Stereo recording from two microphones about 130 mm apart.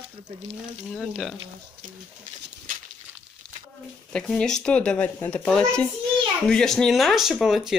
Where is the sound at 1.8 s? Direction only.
90° right.